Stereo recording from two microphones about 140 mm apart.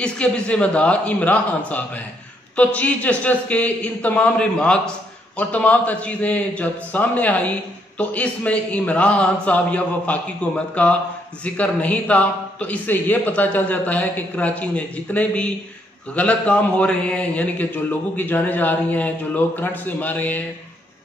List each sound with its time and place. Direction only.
0.0 s a man's voice: 10° left (ahead or behind)